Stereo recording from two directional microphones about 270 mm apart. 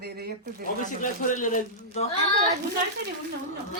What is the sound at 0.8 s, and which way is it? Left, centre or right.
A man's voice, left.